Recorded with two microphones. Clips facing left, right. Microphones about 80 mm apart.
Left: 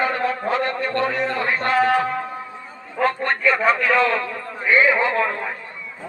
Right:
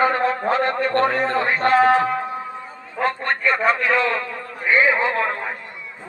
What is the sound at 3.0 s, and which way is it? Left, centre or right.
A man's voice, centre.